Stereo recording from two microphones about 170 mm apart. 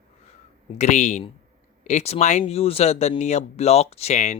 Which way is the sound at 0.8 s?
45° left (ahead or behind).